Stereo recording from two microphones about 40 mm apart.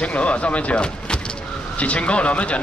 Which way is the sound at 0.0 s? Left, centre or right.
Left.